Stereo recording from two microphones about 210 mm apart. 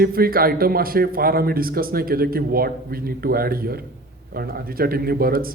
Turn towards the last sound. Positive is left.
turn(degrees=-45)  # may be behind; listen again after turning